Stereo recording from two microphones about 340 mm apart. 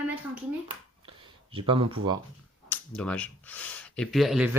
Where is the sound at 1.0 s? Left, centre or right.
Centre.